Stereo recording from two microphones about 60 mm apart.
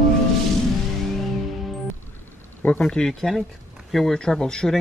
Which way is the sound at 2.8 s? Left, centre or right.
Centre.